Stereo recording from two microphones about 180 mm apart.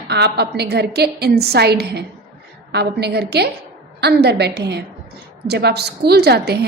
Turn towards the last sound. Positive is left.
turn(degrees=-65)  # may be behind; listen again after turning